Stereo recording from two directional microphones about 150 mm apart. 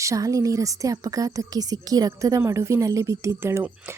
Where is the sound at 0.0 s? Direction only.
20° right (ahead or behind).